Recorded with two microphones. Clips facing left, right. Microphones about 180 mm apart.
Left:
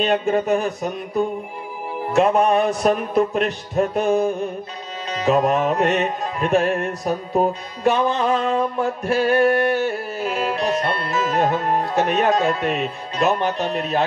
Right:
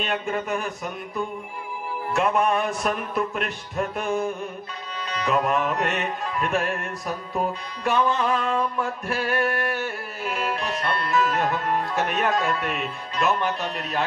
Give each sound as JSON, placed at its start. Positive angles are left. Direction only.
{"t": 0.0, "sound": "music", "side_deg": 30}